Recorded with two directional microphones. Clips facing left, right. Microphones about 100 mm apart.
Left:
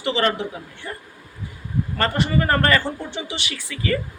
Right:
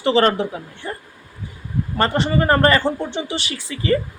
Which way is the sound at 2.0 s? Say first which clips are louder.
Right 3 dB; 30° right (ahead or behind).